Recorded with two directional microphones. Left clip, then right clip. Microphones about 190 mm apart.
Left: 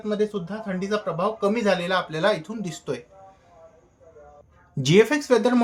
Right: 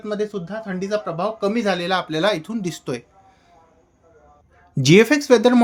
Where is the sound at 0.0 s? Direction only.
35° right (ahead or behind).